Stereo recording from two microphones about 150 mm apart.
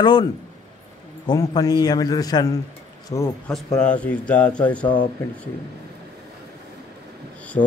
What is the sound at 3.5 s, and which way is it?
Speech, 5° left (ahead or behind).